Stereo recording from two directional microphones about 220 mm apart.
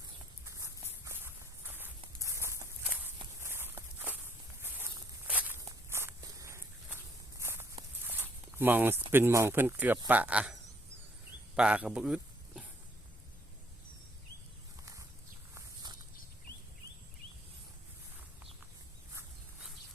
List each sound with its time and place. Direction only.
0.4 s walk: 15° right (ahead or behind)
9.1 s speech: 10° right (ahead or behind)
11.5 s a sound: 5° right (ahead or behind)
15.5 s walk: 20° right (ahead or behind)